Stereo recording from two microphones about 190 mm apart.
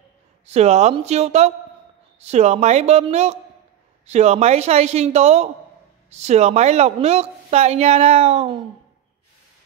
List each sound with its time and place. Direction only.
0.5 s speech: 35° right (ahead or behind)